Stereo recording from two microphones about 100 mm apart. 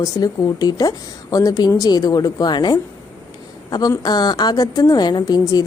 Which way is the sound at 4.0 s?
45° left (ahead or behind).